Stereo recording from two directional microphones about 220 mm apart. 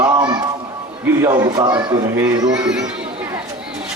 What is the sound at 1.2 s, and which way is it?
A man's voice, 15° right (ahead or behind).